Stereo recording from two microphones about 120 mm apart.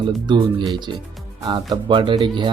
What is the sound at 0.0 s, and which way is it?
Speech, 45° right (ahead or behind).